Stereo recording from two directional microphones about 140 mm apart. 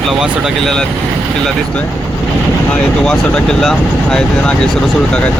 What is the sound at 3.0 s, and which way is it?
Speech, 5° left (ahead or behind).